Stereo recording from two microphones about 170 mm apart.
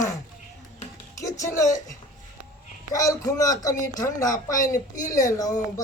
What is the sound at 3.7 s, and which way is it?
Speech, 50° left (ahead or behind).